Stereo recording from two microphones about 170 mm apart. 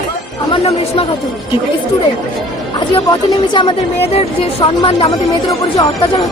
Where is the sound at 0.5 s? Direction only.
35° left (ahead or behind).